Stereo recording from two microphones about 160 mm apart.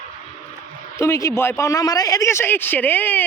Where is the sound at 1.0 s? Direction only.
20° left (ahead or behind).